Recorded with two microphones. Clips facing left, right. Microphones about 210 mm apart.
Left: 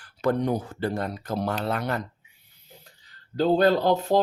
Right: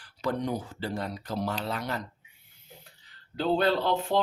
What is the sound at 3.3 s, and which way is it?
Speech, 40° left (ahead or behind).